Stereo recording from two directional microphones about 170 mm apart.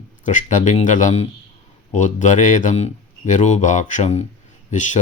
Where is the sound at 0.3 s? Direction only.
45° left (ahead or behind).